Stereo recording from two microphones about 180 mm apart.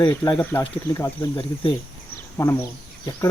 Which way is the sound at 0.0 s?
25° left (ahead or behind).